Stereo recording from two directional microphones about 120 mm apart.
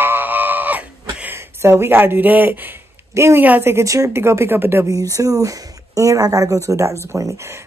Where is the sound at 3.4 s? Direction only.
15° right (ahead or behind).